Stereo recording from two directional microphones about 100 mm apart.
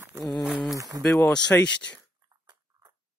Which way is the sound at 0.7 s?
35° right (ahead or behind).